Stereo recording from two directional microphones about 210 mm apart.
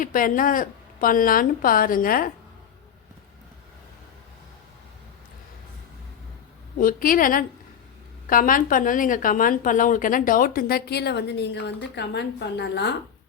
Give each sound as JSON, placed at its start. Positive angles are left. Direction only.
{"t": 0.0, "sound": "a woman's voice", "side_deg": 40}
{"t": 6.7, "sound": "a woman's voice", "side_deg": 40}